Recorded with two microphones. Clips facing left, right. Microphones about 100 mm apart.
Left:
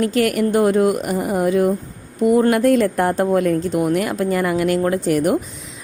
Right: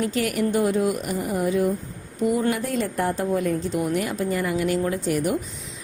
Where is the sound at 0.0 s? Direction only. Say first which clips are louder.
Left 6 dB; 65° left (ahead or behind).